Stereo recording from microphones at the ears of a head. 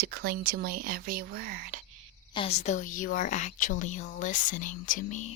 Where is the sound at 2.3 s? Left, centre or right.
Left.